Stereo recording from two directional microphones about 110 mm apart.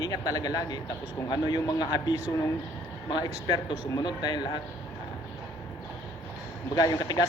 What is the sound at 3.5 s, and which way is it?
Speech, 40° left (ahead or behind).